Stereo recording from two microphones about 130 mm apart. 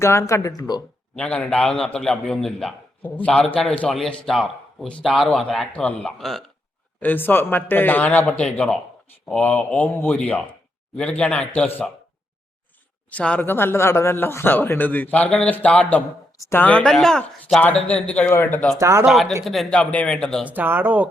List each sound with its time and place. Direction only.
0.0 s speech: 20° left (ahead or behind)
1.1 s a man's voice: 10° left (ahead or behind)
7.0 s a man's voice: 15° left (ahead or behind)
13.1 s speech: 10° left (ahead or behind)
18.3 s speech: 20° left (ahead or behind)
18.8 s speech: 25° right (ahead or behind)
19.0 s a man's voice: centre (ahead or behind)
20.5 s speech: 15° right (ahead or behind)